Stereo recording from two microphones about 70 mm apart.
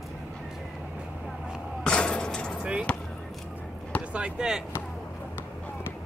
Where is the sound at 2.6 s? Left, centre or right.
Centre.